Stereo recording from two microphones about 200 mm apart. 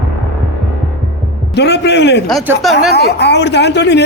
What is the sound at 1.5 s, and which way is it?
Speech, 60° left (ahead or behind).